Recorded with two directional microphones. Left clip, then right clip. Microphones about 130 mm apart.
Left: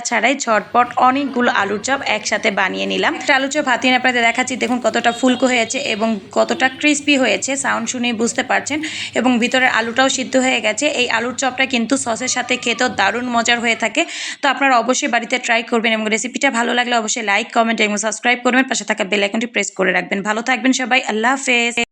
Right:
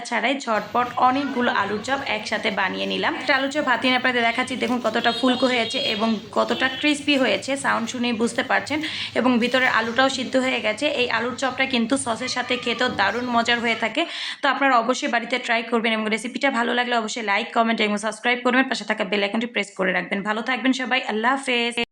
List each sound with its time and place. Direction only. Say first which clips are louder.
0.1 s a woman's voice: left 7 dB; 45° left (ahead or behind)